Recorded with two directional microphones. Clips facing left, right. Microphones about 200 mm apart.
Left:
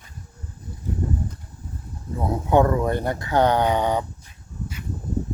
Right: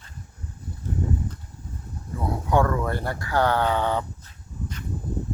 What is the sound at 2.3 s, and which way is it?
Speech, 20° left (ahead or behind).